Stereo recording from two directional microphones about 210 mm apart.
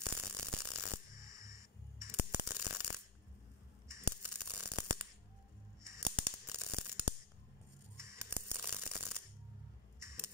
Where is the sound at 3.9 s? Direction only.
10° right (ahead or behind).